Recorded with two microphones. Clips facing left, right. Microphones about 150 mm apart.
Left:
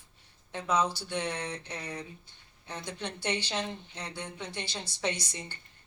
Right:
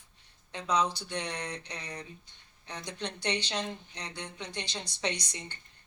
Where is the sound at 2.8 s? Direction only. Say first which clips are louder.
Right 1 dB; 20° right (ahead or behind).